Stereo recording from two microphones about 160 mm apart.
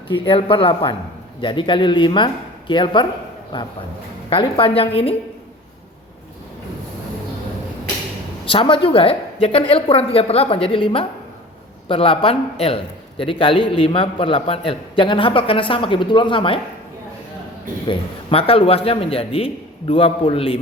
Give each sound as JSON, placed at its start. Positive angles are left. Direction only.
{"t": 0.1, "sound": "a man's voice", "side_deg": 35}
{"t": 4.3, "sound": "a man's voice", "side_deg": 35}
{"t": 8.4, "sound": "a man's voice", "side_deg": 35}
{"t": 17.8, "sound": "a man's voice", "side_deg": 35}